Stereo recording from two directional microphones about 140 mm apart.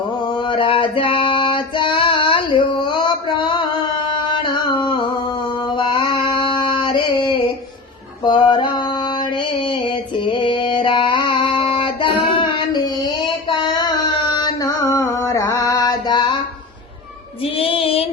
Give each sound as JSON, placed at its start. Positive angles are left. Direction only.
{"t": 0.3, "sound": "a sound", "side_deg": 35}
{"t": 15.7, "sound": "mantra", "side_deg": 30}
{"t": 17.4, "sound": "music", "side_deg": 40}